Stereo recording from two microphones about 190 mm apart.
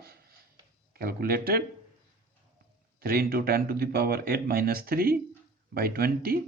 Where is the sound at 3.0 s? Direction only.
50° right (ahead or behind).